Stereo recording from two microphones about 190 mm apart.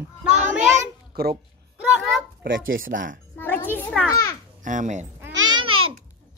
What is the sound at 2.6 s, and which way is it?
Speech, 90° right.